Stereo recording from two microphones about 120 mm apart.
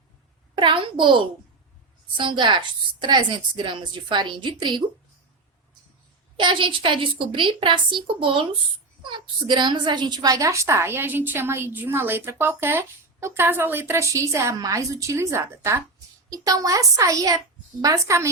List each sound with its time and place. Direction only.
0.5 s a woman's voice: 45° right (ahead or behind)
2.1 s a woman's voice: 40° right (ahead or behind)
6.3 s a woman's voice: 40° right (ahead or behind); by 18.3 s 25° right (ahead or behind)